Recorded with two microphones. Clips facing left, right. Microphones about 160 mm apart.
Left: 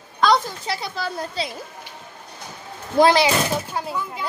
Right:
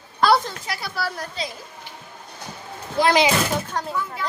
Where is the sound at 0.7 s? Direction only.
20° left (ahead or behind).